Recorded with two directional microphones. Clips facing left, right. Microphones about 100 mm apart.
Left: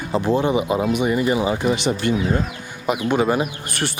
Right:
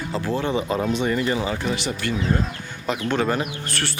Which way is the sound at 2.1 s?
10° left (ahead or behind).